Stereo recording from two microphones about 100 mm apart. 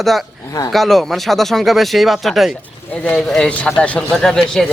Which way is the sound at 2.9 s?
15° left (ahead or behind).